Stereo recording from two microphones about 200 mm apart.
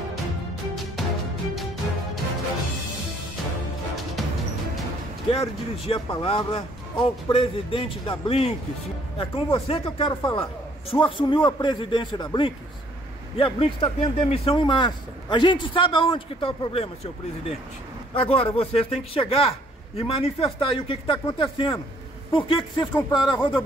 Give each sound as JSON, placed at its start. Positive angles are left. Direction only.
{"t": 4.2, "sound": "music", "side_deg": 0}
{"t": 5.3, "sound": "speech", "side_deg": 30}